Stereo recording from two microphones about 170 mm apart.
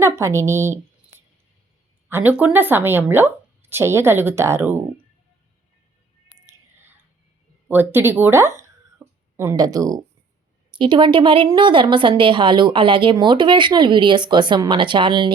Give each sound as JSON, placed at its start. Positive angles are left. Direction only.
{"t": 0.0, "sound": "speech", "side_deg": -15}
{"t": 7.7, "sound": "speech", "side_deg": -10}
{"t": 9.0, "sound": "a sound", "side_deg": -10}
{"t": 9.4, "sound": "a woman's voice", "side_deg": -20}